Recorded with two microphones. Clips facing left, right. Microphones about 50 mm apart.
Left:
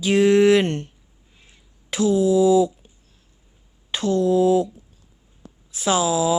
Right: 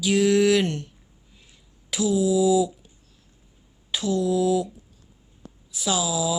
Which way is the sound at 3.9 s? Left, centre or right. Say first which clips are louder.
Left 4 dB; left.